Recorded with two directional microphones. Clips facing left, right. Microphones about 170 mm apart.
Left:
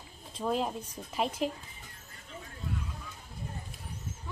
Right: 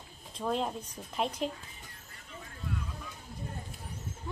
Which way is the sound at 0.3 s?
5° left (ahead or behind).